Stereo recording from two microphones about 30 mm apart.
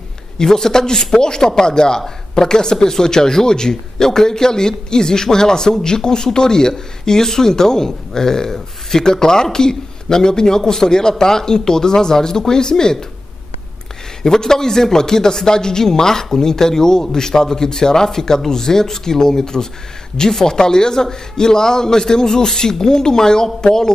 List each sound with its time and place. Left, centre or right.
0.4 s speech: centre
14.2 s speech: centre